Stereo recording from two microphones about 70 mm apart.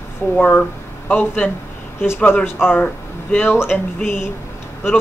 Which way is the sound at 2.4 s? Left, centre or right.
Left.